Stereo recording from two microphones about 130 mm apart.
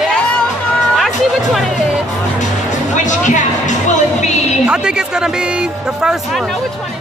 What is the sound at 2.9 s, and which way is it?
Music, 70° left (ahead or behind).